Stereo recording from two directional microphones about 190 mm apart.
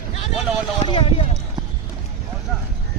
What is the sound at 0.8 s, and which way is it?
Speech, 30° left (ahead or behind).